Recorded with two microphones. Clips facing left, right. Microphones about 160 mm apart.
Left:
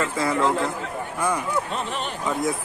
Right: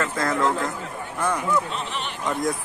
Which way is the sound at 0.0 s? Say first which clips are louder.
Left 1 dB; 10° left (ahead or behind).